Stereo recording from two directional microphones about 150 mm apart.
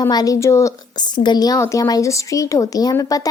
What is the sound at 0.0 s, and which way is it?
Speech, 25° left (ahead or behind).